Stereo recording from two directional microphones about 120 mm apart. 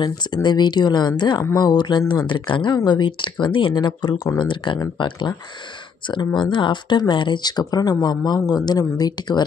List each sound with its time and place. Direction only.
0.0 s speech: 40° left (ahead or behind)